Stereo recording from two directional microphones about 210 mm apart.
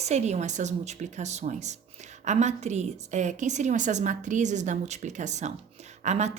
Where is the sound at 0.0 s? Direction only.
35° right (ahead or behind).